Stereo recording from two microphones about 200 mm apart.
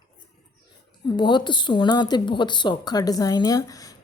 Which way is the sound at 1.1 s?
25° left (ahead or behind).